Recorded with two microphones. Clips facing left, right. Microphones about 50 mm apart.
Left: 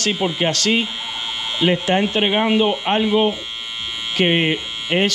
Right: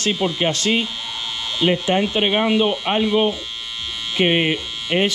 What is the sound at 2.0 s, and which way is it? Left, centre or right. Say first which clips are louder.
Speech: left 1 dB; left.